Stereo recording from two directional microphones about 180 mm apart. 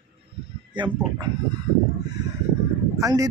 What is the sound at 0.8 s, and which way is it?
Speech, 25° right (ahead or behind).